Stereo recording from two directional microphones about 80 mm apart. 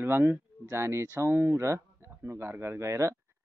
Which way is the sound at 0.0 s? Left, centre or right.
Right.